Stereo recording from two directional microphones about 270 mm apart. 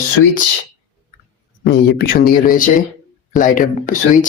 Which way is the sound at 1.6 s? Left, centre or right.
Left.